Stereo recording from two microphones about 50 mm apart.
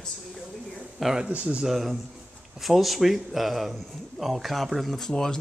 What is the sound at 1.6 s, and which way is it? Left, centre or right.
Speech, centre.